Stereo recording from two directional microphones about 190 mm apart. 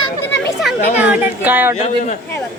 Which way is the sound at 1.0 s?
10° right (ahead or behind).